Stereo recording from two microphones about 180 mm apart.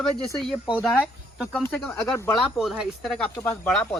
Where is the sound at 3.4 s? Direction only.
10° left (ahead or behind).